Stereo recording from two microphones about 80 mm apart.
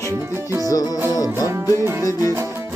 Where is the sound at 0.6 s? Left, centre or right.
Left.